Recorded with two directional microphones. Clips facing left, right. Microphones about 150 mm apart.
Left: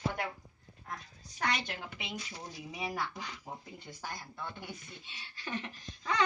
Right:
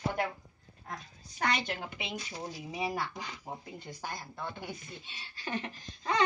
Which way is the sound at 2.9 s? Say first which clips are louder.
Right 2 dB; 10° right (ahead or behind).